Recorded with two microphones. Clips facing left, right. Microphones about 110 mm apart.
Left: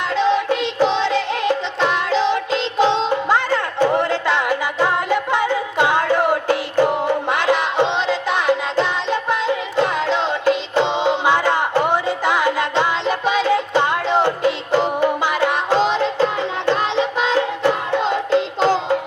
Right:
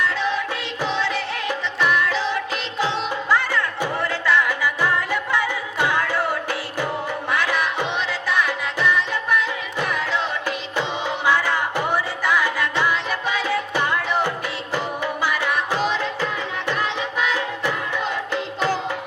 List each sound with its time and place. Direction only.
0.0 s music: 20° left (ahead or behind)